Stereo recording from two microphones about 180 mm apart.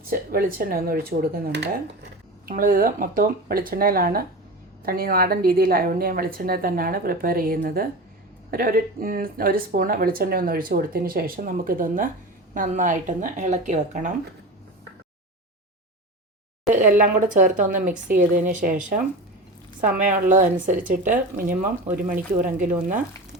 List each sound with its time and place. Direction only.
0.1 s speech: 55° right (ahead or behind)
1.5 s speech: 70° right (ahead or behind)
2.5 s speech: 50° right (ahead or behind)
16.7 s speech: 50° right (ahead or behind)